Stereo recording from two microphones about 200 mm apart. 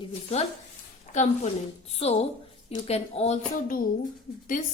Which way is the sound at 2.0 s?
30° left (ahead or behind).